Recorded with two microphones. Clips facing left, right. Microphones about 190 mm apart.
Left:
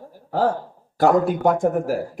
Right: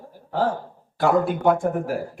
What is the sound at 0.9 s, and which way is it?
Speech, 40° left (ahead or behind).